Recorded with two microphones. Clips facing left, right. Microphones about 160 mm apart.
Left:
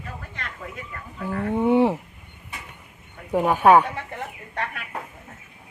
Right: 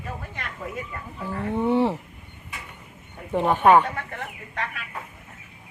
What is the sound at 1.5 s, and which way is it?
Speech, 15° left (ahead or behind).